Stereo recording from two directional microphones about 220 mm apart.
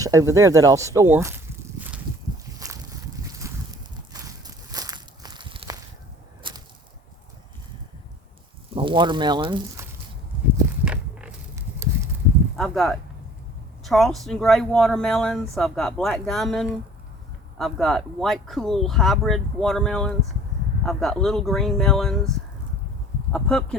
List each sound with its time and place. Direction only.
0.0 s speech: 15° right (ahead or behind)
3.2 s boat: 15° right (ahead or behind)
4.1 s a sound: 15° right (ahead or behind)
8.7 s speech: 20° right (ahead or behind)
10.8 s a sound: 5° right (ahead or behind)
12.5 s speech: centre (ahead or behind)
23.3 s speech: 5° left (ahead or behind)